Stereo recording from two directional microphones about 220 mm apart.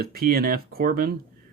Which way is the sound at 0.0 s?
45° right (ahead or behind).